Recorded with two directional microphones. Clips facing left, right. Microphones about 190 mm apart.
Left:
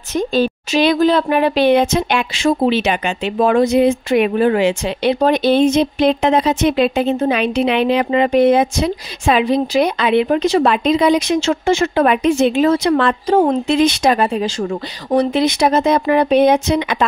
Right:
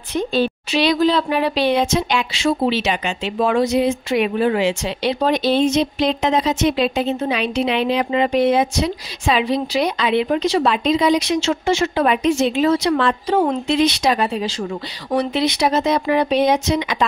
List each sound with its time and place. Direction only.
0.1 s speech: 45° left (ahead or behind)